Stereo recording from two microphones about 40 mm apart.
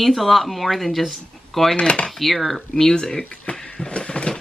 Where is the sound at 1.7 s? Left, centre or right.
Left.